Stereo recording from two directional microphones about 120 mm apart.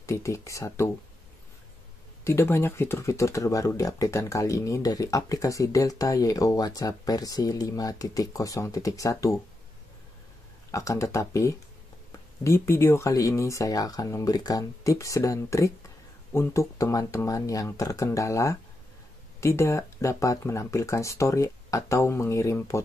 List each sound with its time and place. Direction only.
0.0 s speech: 25° left (ahead or behind)
2.2 s speech: 20° left (ahead or behind)
10.7 s speech: 25° left (ahead or behind)